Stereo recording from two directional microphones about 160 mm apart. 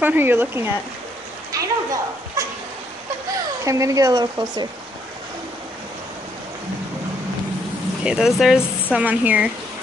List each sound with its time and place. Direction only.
0.0 s speech: 10° right (ahead or behind)
3.6 s speech: 20° right (ahead or behind)
8.0 s speech: 5° right (ahead or behind)